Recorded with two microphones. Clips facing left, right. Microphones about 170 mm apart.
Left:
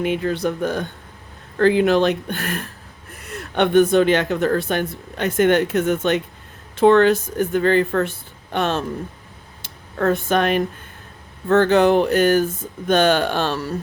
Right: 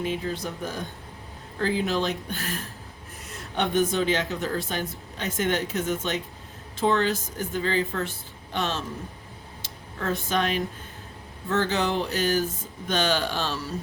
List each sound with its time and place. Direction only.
0.0 s speech: 70° left (ahead or behind)
9.6 s a sound: 55° left (ahead or behind)
11.4 s speech: 60° left (ahead or behind)